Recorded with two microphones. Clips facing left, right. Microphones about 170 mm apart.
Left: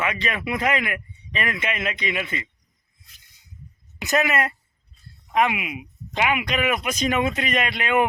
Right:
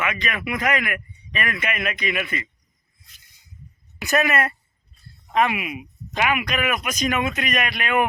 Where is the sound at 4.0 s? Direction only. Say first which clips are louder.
Right 1 dB; 20° left (ahead or behind).